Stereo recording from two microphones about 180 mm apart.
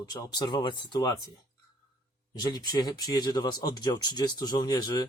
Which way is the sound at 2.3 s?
20° left (ahead or behind).